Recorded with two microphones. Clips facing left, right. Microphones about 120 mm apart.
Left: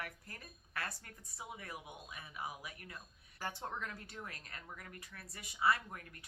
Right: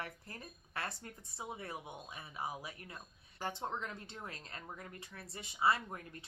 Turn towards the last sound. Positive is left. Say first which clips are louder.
# right 1 dB
turn(degrees=-25)  # may be behind; listen again after turning